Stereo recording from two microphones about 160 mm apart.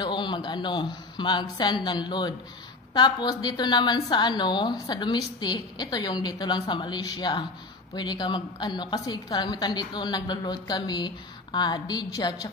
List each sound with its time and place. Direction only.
0.0 s a man's voice: 30° left (ahead or behind)